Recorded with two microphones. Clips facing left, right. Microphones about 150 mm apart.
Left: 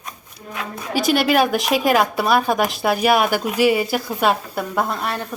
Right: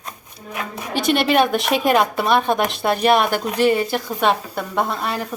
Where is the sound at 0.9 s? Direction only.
5° left (ahead or behind).